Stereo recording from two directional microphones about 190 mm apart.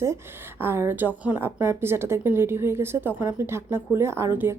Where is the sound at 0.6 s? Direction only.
10° right (ahead or behind).